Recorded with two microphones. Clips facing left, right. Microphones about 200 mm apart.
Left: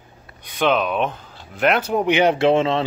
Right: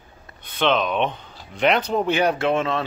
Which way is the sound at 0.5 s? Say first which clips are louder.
Left 1 dB; 10° left (ahead or behind).